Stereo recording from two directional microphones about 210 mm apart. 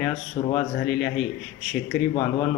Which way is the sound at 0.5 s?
Centre (ahead or behind).